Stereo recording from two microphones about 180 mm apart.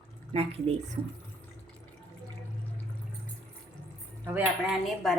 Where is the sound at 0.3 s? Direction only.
30° right (ahead or behind).